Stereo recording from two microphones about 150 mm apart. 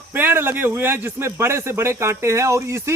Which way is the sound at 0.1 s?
15° right (ahead or behind).